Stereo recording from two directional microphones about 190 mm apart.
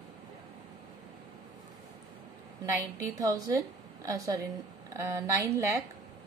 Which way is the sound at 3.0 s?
20° right (ahead or behind).